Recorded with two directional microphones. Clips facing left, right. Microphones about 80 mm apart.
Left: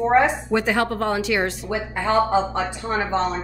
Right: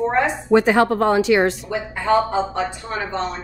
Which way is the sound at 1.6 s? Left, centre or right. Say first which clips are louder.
Right 3 dB; left.